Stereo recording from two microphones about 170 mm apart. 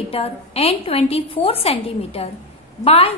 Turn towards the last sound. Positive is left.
turn(degrees=35)  # may be behind; listen again after turning